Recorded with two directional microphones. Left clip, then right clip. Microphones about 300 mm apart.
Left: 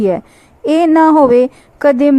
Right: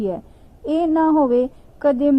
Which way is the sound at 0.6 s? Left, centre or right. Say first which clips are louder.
Left 9 dB; left.